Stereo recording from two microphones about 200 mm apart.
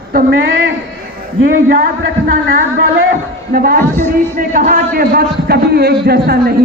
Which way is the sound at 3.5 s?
45° right (ahead or behind).